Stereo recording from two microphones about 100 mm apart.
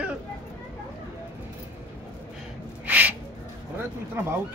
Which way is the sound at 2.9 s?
15° right (ahead or behind).